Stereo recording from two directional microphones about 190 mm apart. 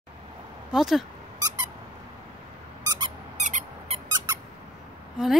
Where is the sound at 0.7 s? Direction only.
Centre (ahead or behind).